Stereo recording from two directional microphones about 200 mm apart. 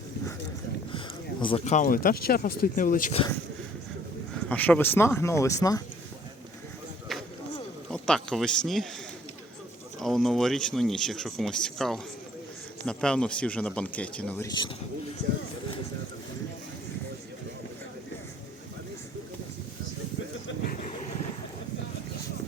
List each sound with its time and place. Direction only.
0.9 s speech: 25° left (ahead or behind); by 3.2 s 40° left (ahead or behind)
4.4 s speech: 5° left (ahead or behind)
7.1 s a sound: centre (ahead or behind)
7.9 s speech: 5° left (ahead or behind)
10.0 s speech: centre (ahead or behind)
14.4 s speech: 20° left (ahead or behind)